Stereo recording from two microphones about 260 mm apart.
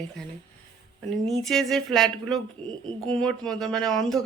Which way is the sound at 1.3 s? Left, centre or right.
Centre.